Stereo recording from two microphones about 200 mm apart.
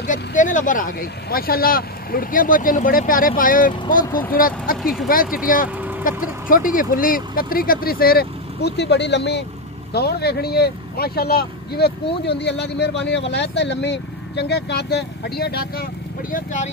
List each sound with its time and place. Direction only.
0.0 s speech: 40° left (ahead or behind)